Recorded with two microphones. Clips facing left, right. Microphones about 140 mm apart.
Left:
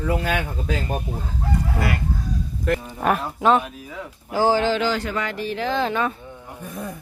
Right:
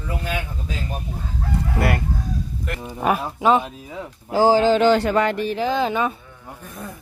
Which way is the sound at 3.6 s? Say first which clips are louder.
Right 1 dB; 30° right (ahead or behind).